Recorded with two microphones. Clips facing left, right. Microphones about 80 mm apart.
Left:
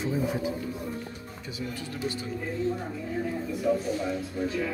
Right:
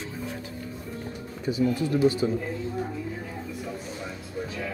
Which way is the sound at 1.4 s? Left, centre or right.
Right.